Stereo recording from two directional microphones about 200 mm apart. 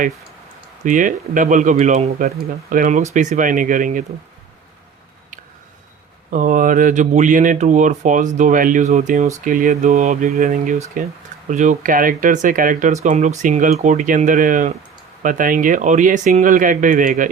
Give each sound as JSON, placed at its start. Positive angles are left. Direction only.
{"t": 0.9, "sound": "speech", "side_deg": -40}
{"t": 6.3, "sound": "speech", "side_deg": -40}